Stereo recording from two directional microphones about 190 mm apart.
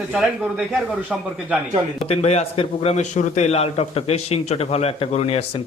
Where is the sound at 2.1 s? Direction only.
35° left (ahead or behind).